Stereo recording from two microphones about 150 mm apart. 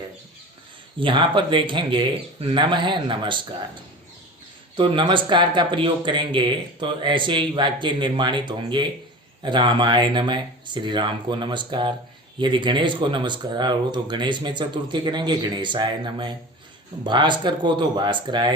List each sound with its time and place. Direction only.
0.9 s speech: 35° right (ahead or behind)
4.8 s speech: 35° right (ahead or behind)